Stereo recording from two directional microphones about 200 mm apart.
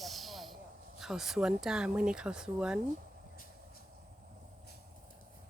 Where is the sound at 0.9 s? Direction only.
Centre (ahead or behind).